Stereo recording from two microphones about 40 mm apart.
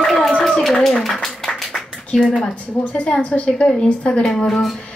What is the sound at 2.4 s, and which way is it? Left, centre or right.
A woman's voice, left.